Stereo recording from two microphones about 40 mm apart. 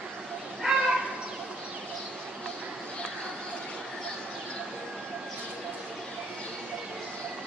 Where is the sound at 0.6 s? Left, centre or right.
Centre.